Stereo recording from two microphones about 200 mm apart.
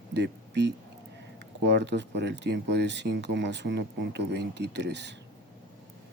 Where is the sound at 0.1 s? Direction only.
60° right (ahead or behind).